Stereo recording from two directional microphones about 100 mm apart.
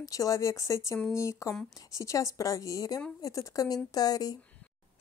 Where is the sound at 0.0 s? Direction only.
35° left (ahead or behind).